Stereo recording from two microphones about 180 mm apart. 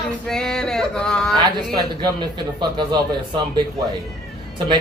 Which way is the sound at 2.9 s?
25° right (ahead or behind).